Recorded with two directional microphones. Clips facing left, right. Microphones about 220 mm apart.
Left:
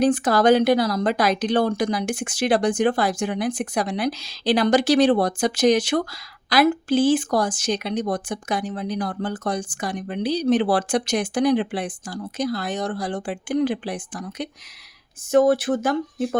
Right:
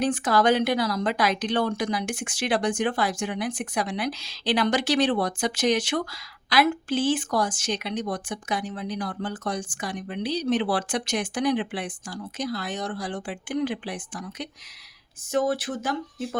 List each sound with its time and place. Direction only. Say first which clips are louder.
0.0 s speech: left 5 dB; 40° left (ahead or behind)